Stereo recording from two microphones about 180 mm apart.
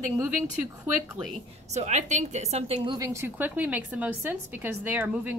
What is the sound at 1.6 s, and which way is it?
A woman's voice, 40° right (ahead or behind).